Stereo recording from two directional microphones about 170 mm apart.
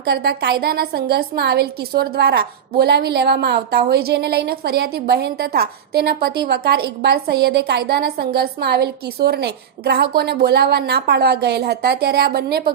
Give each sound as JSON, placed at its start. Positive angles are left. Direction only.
{"t": 0.0, "sound": "a woman's voice", "side_deg": -70}